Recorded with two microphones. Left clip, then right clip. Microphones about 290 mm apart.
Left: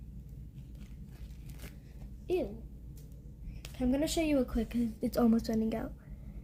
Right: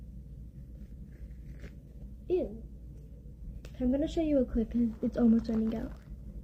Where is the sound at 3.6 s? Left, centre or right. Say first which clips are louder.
Right 1 dB; centre.